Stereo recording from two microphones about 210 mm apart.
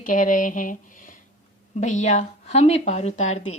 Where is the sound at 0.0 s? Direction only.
40° left (ahead or behind).